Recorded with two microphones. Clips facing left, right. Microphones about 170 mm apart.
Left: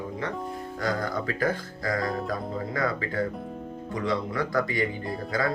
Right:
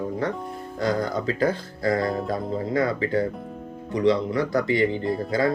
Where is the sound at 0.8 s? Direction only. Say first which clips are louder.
Right 5 dB; 25° right (ahead or behind).